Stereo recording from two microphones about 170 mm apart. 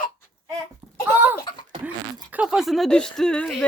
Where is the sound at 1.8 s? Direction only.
10° right (ahead or behind).